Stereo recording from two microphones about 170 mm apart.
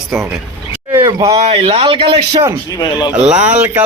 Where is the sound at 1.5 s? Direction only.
35° right (ahead or behind).